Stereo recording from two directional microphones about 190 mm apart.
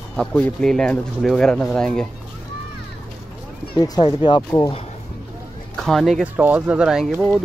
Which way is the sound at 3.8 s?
20° left (ahead or behind).